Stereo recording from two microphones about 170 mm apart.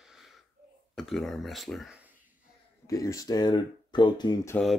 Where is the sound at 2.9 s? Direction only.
20° left (ahead or behind).